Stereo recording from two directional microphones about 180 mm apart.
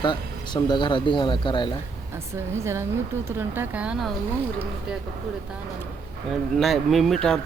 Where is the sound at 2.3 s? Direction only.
15° right (ahead or behind).